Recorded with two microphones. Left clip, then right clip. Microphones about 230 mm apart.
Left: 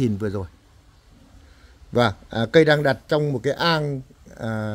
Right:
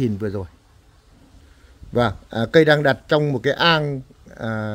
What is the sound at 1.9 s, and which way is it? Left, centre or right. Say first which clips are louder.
A man's voice: even; centre.